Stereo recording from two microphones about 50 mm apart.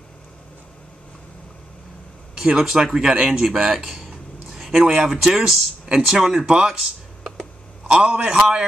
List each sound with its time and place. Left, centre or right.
2.5 s speech: centre
4.6 s a sound: centre
5.0 s speech: centre
6.8 s computer keyboard: centre
8.1 s speech: centre